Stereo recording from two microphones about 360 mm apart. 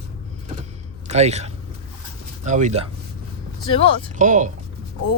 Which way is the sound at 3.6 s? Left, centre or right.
Centre.